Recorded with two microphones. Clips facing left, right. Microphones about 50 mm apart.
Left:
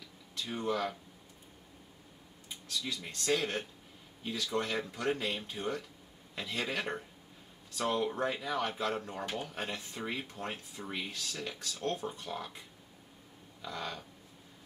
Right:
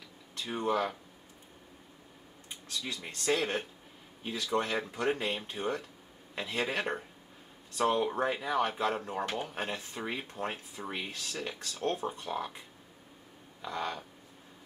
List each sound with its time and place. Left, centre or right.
0.4 s speech: centre
2.8 s speech: centre
9.3 s speech: right
9.6 s speech: centre
13.7 s speech: centre